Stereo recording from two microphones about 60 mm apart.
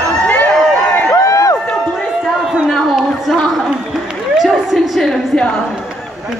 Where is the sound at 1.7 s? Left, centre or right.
Centre.